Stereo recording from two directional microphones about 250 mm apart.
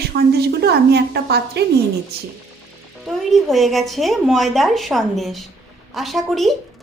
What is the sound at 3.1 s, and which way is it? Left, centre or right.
A woman's voice, centre.